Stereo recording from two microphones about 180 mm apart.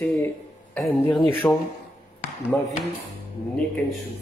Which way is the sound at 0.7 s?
10° left (ahead or behind).